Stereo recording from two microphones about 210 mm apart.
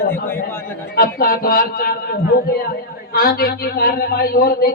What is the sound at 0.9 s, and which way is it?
A man's voice, 45° left (ahead or behind).